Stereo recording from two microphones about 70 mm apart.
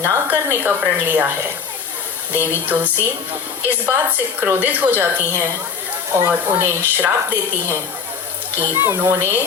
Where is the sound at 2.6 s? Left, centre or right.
Right.